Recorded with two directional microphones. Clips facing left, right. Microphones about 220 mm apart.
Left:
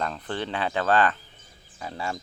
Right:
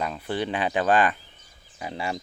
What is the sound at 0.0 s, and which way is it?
Speech, 10° right (ahead or behind).